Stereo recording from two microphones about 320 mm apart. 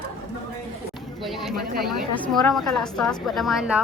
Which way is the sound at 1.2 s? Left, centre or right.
Centre.